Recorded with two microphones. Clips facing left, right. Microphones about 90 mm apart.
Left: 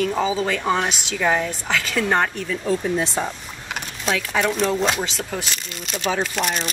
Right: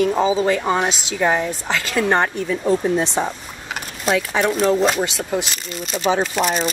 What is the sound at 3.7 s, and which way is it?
A woman's voice, 5° right (ahead or behind).